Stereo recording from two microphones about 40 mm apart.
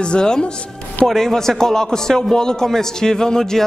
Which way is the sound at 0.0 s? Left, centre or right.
Left.